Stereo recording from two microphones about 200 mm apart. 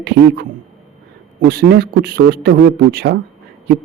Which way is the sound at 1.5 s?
50° right (ahead or behind).